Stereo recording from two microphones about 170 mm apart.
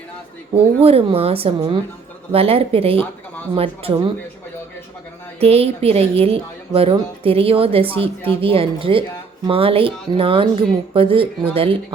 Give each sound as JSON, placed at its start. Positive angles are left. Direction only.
{"t": 0.5, "sound": "speech", "side_deg": -35}
{"t": 5.4, "sound": "speech", "side_deg": -35}